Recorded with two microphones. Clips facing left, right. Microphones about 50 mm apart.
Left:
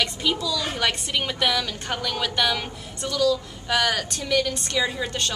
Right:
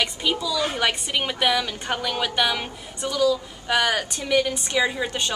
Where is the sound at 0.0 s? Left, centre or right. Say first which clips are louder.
Even; centre.